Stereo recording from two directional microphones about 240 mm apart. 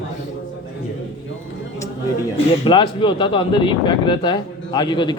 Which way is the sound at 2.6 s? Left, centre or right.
Left.